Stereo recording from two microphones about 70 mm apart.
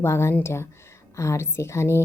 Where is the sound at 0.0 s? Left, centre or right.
Left.